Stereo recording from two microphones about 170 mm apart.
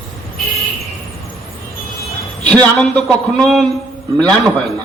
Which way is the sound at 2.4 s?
5° left (ahead or behind).